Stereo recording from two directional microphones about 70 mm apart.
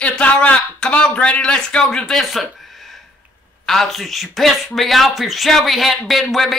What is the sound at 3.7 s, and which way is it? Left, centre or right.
Speech, centre.